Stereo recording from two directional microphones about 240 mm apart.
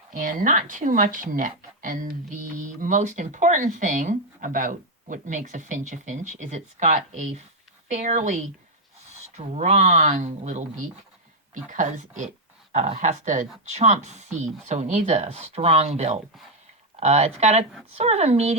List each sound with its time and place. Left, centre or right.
0.1 s speech: right